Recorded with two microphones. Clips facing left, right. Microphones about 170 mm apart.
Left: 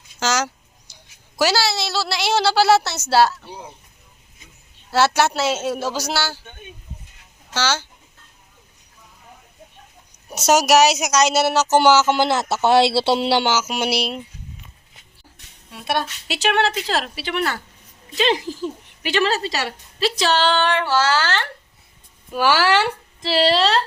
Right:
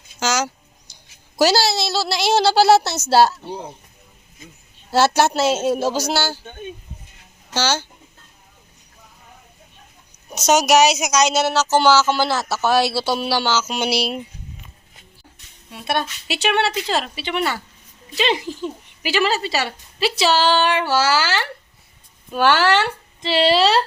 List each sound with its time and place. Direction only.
0.2 s speech: centre (ahead or behind)
1.4 s a woman's voice: 40° right (ahead or behind)
4.9 s a woman's voice: 40° right (ahead or behind)
10.2 s a woman's voice: 5° left (ahead or behind)
15.7 s speech: centre (ahead or behind)
22.3 s speech: 10° left (ahead or behind)